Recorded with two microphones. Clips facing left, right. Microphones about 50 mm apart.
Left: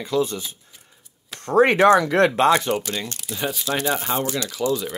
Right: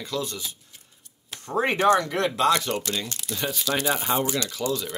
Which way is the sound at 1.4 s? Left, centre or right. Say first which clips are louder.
Left 6 dB; left.